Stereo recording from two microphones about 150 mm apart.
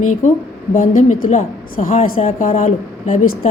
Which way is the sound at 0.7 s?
60° left (ahead or behind).